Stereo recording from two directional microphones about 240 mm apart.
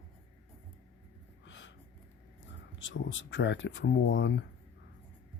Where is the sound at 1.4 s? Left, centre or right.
Left.